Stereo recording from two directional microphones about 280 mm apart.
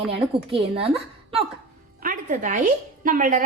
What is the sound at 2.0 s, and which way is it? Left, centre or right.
A woman's voice, right.